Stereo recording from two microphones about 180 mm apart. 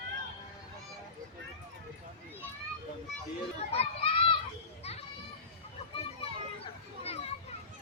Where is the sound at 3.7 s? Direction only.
35° left (ahead or behind).